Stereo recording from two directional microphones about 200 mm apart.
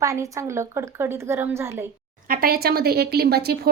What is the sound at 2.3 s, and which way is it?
Speech, 45° right (ahead or behind).